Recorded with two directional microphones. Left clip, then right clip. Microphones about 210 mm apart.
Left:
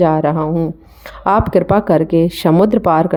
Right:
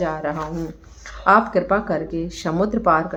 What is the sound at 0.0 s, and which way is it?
Speech, 50° left (ahead or behind).